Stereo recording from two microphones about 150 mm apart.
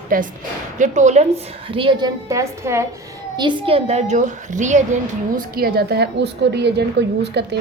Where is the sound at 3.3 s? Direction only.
35° right (ahead or behind); by 4.8 s 55° right (ahead or behind).